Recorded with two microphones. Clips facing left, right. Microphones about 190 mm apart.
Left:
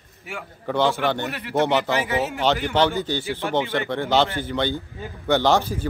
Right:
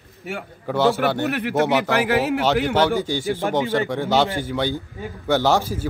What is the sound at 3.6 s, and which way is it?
Speech, 35° right (ahead or behind).